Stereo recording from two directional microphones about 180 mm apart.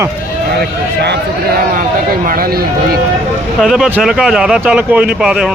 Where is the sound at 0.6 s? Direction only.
65° right (ahead or behind).